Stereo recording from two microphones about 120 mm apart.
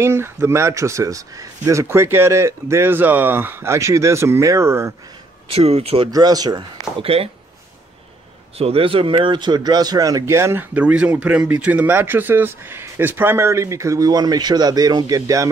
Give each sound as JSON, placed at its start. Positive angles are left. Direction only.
{"t": 0.0, "sound": "a man's voice", "side_deg": -20}
{"t": 5.5, "sound": "speech", "side_deg": -55}
{"t": 6.1, "sound": "speech", "side_deg": -35}
{"t": 7.0, "sound": "speech", "side_deg": -55}
{"t": 8.5, "sound": "a man's voice", "side_deg": -55}